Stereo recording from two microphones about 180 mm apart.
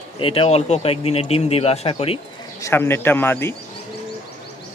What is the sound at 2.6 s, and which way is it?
Speech, 15° left (ahead or behind).